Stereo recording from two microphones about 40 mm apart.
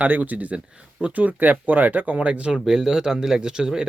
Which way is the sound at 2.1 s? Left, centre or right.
Right.